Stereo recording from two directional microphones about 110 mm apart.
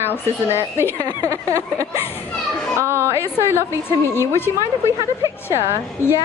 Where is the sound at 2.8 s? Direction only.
25° right (ahead or behind).